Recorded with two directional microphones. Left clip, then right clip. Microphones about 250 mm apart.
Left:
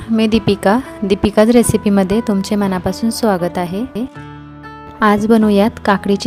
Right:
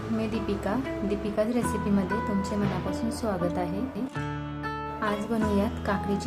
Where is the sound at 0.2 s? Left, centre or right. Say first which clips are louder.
Left 17 dB; left.